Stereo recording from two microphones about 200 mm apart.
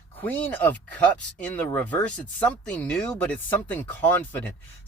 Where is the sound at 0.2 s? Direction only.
10° left (ahead or behind).